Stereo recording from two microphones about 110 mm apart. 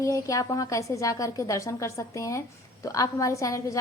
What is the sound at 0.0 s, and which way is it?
A woman's voice, 30° left (ahead or behind).